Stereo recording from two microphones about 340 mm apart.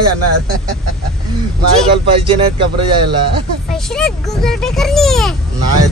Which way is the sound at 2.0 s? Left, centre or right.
Centre.